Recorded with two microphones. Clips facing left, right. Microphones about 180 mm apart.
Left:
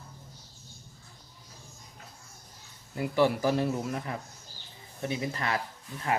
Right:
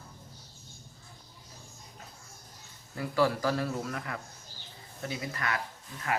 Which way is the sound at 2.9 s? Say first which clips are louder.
Left 2 dB; 20° left (ahead or behind).